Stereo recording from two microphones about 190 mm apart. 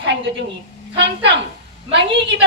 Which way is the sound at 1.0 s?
65° right (ahead or behind).